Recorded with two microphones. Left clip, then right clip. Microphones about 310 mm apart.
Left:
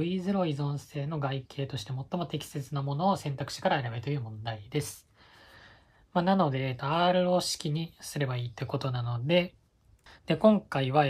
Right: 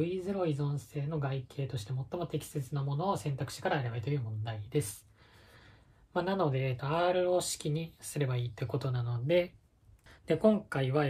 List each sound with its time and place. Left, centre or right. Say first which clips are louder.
0.0 s speech: left 2 dB; left
6.1 s speech: left 5 dB; left